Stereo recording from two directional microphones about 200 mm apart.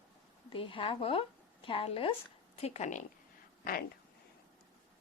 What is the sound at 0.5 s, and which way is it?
A woman's voice, 25° left (ahead or behind).